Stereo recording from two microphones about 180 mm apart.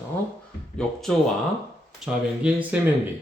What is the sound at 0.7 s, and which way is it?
Speech, centre (ahead or behind).